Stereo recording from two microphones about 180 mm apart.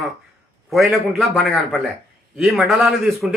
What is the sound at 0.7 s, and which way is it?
Speech, centre (ahead or behind).